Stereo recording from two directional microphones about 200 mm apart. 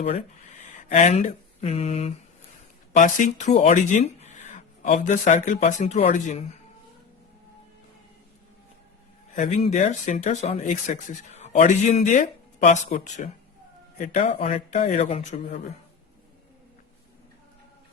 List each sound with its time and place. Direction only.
0.6 s speech: 40° left (ahead or behind)
9.3 s speech: 35° left (ahead or behind)